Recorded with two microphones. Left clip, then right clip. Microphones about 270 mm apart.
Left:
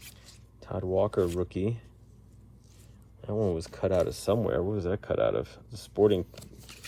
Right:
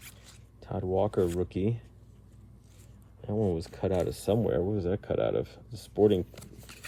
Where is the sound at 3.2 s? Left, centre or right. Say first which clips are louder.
Left 1 dB; left.